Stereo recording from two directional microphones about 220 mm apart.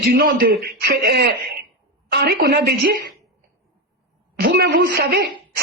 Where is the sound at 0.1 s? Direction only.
40° right (ahead or behind).